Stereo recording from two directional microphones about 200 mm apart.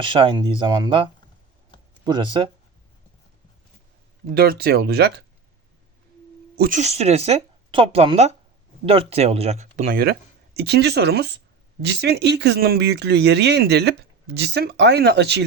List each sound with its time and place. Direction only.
0.0 s speech: 25° right (ahead or behind)
2.0 s speech: 20° right (ahead or behind)
4.4 s speech: 50° right (ahead or behind)
6.6 s speech: 40° right (ahead or behind); by 15.4 s 60° right (ahead or behind)